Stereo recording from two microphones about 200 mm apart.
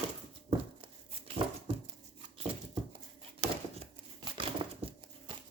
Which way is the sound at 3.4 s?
30° right (ahead or behind).